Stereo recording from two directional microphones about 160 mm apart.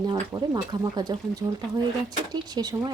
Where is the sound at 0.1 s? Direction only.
25° right (ahead or behind).